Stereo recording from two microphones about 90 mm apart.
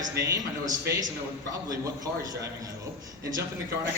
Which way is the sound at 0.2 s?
40° right (ahead or behind).